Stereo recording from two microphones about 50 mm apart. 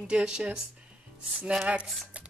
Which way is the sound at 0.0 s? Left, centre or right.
Centre.